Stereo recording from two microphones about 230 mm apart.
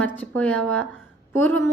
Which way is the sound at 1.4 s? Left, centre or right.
Right.